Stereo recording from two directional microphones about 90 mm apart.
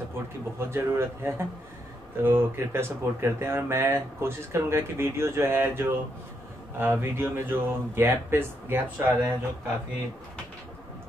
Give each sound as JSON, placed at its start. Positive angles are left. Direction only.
{"t": 0.6, "sound": "speech", "side_deg": -30}